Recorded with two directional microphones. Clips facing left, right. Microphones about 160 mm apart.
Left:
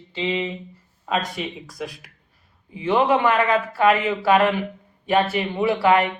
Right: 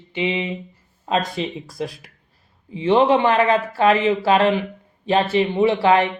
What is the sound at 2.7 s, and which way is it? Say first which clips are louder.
Speech: right 3 dB; 25° right (ahead or behind).